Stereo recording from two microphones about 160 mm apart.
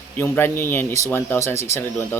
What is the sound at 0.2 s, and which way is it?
Speech, 15° left (ahead or behind).